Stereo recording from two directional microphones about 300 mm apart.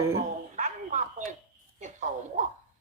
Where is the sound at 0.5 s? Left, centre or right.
Right.